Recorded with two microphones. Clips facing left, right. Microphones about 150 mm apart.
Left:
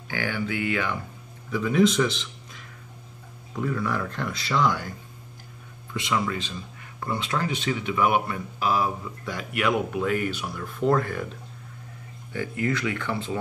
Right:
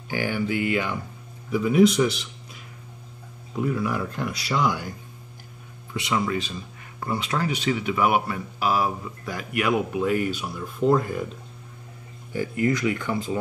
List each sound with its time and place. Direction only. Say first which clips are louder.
0.1 s speech: right 3 dB; 15° right (ahead or behind)
3.5 s speech: right 2 dB; 15° right (ahead or behind)
5.9 s speech: right 2 dB; 20° right (ahead or behind)
12.3 s speech: right 3 dB; 25° right (ahead or behind)